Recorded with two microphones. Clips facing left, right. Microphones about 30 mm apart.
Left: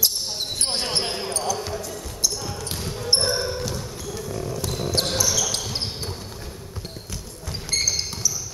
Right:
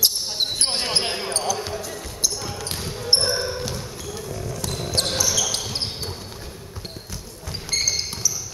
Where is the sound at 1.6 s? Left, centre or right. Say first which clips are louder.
Right 1 dB; centre.